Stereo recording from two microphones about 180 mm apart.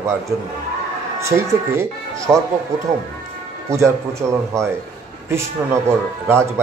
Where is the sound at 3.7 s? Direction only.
15° right (ahead or behind).